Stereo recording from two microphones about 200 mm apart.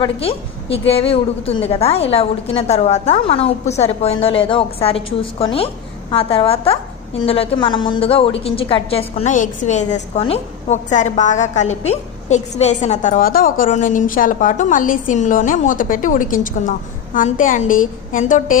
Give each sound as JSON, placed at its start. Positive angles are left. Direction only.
{"t": 0.0, "sound": "a woman's voice", "side_deg": 30}